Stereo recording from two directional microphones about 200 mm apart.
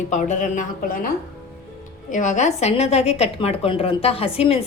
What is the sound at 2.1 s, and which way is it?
A woman's voice, 40° left (ahead or behind).